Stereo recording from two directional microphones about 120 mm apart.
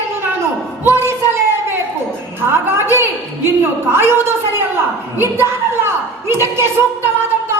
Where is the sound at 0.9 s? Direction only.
20° right (ahead or behind).